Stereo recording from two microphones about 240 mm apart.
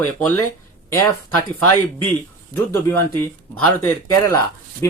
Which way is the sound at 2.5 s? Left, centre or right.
Right.